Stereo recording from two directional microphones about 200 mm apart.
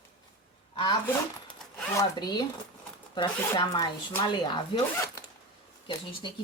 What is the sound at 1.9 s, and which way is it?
Speech, 20° left (ahead or behind).